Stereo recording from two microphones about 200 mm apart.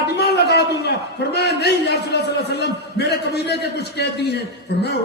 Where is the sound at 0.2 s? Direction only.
55° left (ahead or behind).